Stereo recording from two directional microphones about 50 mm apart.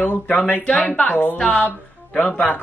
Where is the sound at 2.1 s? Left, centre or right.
Left.